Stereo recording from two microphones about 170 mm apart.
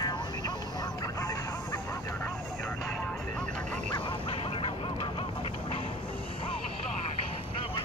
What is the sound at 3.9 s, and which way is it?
Honk, 30° left (ahead or behind).